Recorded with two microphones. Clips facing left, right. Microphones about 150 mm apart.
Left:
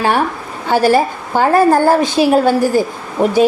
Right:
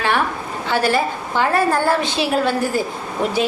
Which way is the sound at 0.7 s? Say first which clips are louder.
Left 7 dB; 40° left (ahead or behind).